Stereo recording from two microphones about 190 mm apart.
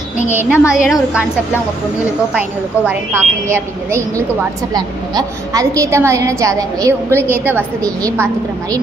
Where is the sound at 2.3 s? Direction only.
10° right (ahead or behind).